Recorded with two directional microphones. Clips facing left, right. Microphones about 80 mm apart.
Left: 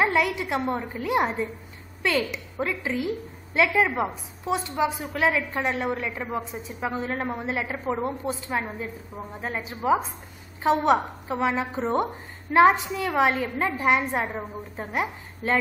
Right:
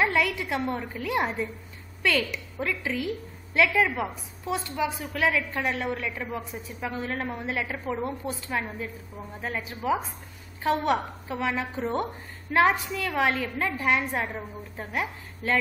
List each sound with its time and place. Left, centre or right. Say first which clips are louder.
0.0 s a woman's voice: left 2 dB; centre